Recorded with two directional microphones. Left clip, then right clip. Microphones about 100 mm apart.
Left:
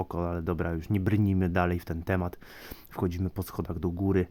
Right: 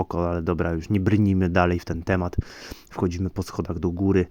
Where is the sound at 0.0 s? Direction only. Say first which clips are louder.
Right 7 dB; 45° right (ahead or behind).